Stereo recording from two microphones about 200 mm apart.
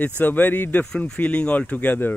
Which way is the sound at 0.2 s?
10° left (ahead or behind).